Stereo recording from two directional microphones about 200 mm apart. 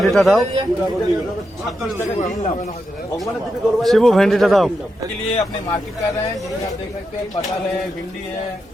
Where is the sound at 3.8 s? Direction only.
Centre (ahead or behind).